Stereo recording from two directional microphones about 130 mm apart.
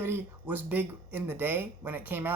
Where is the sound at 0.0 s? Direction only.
15° right (ahead or behind).